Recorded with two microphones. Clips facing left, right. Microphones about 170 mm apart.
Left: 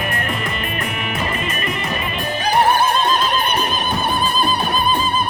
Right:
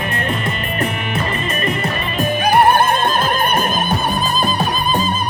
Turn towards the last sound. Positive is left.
turn(degrees=-45)  # may be behind; listen again after turning